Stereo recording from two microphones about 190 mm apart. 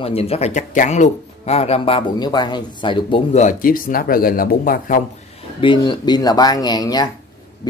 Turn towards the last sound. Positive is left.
turn(degrees=20)  # may be behind; listen again after turning